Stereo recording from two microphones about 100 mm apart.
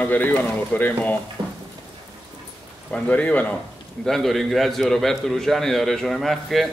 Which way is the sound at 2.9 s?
15° left (ahead or behind).